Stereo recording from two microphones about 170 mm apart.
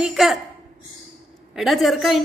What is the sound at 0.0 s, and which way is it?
Speech, centre (ahead or behind).